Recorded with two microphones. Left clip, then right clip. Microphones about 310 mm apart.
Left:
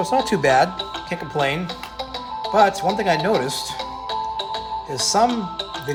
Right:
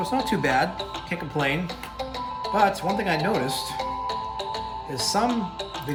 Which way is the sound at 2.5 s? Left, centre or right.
Left.